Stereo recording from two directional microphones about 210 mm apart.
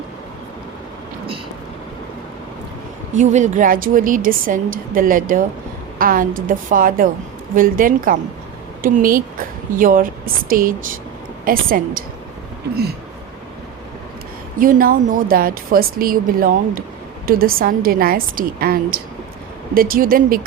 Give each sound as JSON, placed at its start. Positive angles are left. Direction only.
{"t": 3.2, "sound": "a woman's voice", "side_deg": -35}
{"t": 14.6, "sound": "a woman's voice", "side_deg": -40}